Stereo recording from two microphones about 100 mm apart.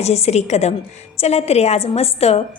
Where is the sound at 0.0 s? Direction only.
90° left.